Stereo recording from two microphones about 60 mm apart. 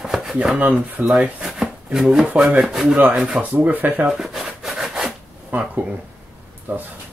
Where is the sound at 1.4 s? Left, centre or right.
Centre.